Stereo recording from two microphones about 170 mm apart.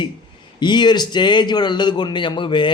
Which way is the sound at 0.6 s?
25° left (ahead or behind).